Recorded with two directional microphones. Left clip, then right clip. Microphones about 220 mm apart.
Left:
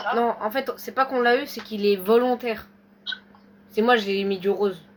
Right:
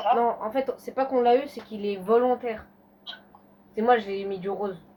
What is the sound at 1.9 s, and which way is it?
Speech, 40° left (ahead or behind).